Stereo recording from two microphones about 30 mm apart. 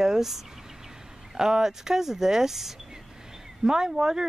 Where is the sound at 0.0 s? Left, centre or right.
Centre.